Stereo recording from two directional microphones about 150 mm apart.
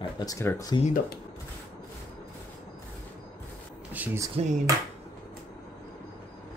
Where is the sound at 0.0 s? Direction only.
25° left (ahead or behind).